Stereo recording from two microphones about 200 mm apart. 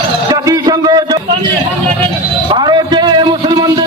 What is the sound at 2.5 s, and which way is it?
A man's voice, 20° right (ahead or behind).